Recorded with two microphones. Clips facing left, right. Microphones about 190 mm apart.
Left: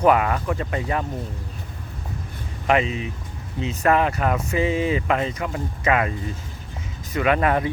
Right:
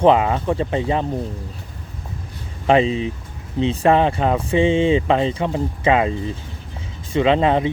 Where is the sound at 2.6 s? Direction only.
30° right (ahead or behind).